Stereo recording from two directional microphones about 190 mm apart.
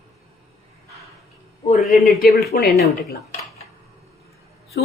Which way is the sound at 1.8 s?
Centre (ahead or behind).